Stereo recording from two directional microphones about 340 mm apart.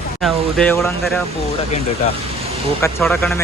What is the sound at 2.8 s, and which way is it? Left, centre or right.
Speech, centre.